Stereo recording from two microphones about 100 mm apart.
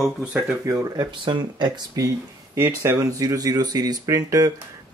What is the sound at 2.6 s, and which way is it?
Speech, 30° right (ahead or behind).